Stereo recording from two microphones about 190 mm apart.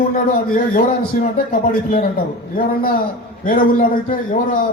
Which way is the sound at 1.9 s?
50° left (ahead or behind).